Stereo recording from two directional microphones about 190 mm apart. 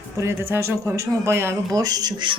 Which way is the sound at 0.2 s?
15° right (ahead or behind).